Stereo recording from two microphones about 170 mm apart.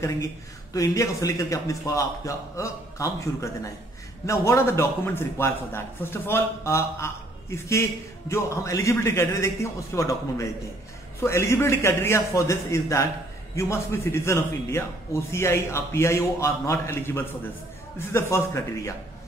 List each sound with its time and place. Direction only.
0.7 s a man's voice: 20° left (ahead or behind)